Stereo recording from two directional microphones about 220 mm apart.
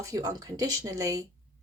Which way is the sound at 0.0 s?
15° right (ahead or behind).